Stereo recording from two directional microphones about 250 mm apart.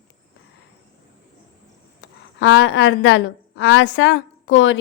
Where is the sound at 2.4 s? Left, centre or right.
Left.